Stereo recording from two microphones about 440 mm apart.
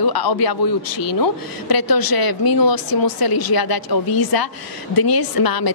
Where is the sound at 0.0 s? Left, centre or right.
Left.